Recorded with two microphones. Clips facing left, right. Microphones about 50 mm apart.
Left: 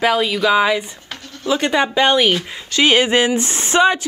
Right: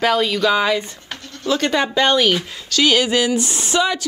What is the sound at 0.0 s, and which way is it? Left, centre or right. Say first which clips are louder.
Speech: left 1 dB; centre.